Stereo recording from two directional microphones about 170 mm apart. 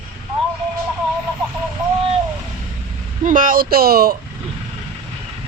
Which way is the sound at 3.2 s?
50° right (ahead or behind).